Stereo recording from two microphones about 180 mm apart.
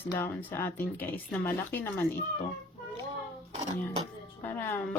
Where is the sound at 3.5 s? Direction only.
35° right (ahead or behind).